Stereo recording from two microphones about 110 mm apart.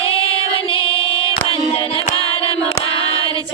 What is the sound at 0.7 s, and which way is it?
Child singing, 55° left (ahead or behind).